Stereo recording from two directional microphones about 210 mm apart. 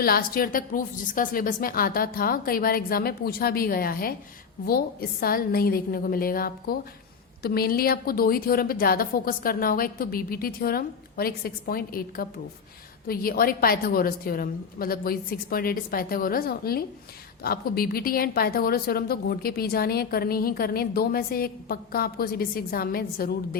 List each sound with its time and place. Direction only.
0.0 s a woman's voice: 45° left (ahead or behind)